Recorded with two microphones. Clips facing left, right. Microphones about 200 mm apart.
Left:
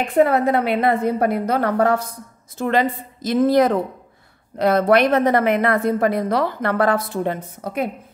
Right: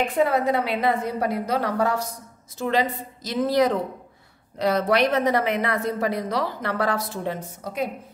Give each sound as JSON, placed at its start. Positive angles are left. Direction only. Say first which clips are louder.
{"t": 0.1, "sound": "a woman's voice", "louder": "left 5 dB", "side_deg": 60}